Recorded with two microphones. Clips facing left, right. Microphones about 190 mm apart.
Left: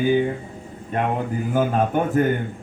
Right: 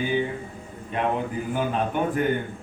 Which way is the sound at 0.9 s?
45° left (ahead or behind).